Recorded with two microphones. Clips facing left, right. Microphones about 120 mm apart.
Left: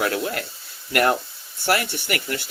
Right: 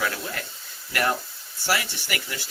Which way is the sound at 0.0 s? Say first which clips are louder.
Left 6 dB; 60° left (ahead or behind).